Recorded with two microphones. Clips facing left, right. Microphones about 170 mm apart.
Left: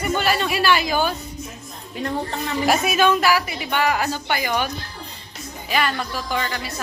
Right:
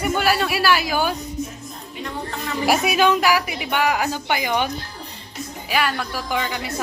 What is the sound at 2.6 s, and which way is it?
Speech, 15° right (ahead or behind).